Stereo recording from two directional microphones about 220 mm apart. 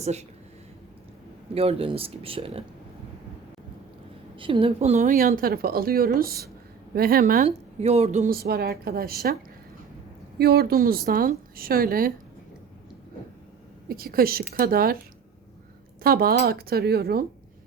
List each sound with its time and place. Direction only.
0.0 s speech: 30° right (ahead or behind)
1.5 s speech: 25° right (ahead or behind)
4.4 s speech: 25° right (ahead or behind); by 9.3 s 40° right (ahead or behind)
10.3 s a woman's voice: 45° right (ahead or behind)
13.8 s a woman's voice: 40° right (ahead or behind)
16.0 s a woman's voice: 45° right (ahead or behind)